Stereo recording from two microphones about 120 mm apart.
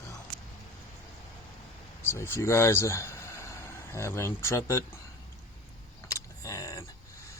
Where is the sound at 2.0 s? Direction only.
20° left (ahead or behind).